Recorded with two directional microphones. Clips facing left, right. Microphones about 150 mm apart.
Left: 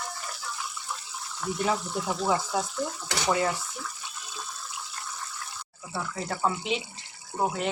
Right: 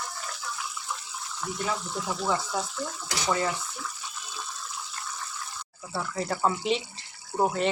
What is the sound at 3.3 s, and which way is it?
Speech, 20° left (ahead or behind).